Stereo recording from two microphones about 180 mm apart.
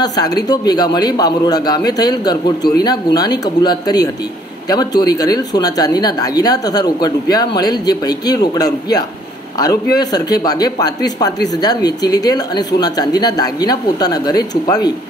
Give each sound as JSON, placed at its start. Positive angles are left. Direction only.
{"t": 0.0, "sound": "speech", "side_deg": 20}